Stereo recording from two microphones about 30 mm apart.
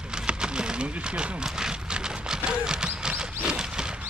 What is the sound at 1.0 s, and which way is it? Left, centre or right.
Speech, right.